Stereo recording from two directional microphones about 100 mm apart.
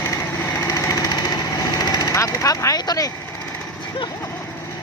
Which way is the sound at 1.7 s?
40° left (ahead or behind).